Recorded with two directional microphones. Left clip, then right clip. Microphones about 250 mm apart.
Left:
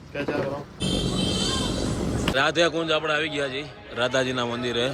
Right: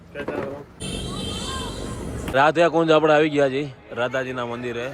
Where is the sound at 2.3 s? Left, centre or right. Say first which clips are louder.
Right 5 dB; centre.